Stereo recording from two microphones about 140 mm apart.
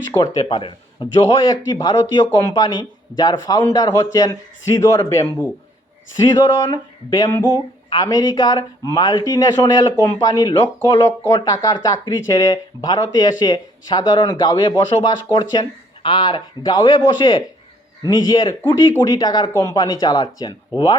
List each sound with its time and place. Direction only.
0.2 s a man's voice: 30° left (ahead or behind)